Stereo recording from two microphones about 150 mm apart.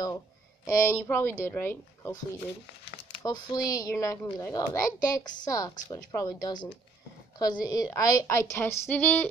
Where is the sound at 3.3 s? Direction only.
25° left (ahead or behind).